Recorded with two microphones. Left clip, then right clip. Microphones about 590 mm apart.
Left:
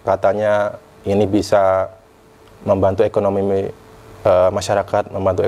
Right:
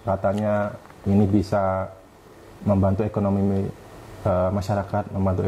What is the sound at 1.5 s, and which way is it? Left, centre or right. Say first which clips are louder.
A man's voice: left 9 dB; left.